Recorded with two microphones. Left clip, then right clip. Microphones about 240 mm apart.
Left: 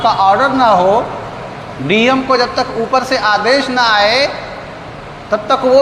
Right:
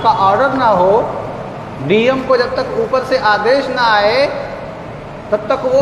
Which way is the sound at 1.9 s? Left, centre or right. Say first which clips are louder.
Left 1 dB; left.